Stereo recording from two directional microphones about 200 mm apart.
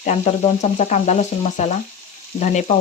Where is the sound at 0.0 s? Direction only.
35° left (ahead or behind).